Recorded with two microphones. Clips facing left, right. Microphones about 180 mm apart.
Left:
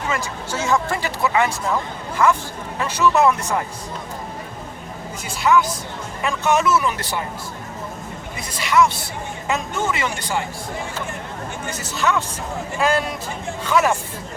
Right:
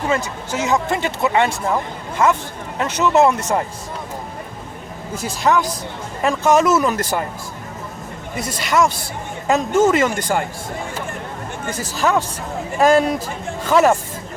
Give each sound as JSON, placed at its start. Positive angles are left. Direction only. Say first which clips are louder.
{"t": 0.5, "sound": "speech", "louder": "right 2 dB", "side_deg": -20}
{"t": 2.8, "sound": "speech", "louder": "right 2 dB", "side_deg": -20}
{"t": 5.5, "sound": "speech", "louder": "even", "side_deg": -45}
{"t": 8.4, "sound": "speech", "louder": "even", "side_deg": -45}
{"t": 11.9, "sound": "speech", "louder": "right 3 dB", "side_deg": -40}